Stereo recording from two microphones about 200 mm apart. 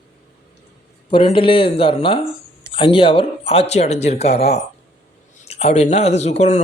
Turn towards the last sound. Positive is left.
turn(degrees=35)  # may be behind; listen again after turning